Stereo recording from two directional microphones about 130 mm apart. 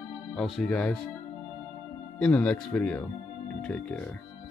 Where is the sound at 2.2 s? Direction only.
10° left (ahead or behind).